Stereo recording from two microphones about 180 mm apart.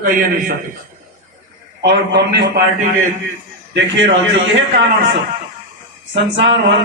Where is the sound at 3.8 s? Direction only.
85° right.